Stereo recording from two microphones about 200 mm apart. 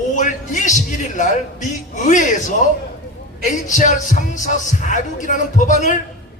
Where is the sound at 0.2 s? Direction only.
40° left (ahead or behind).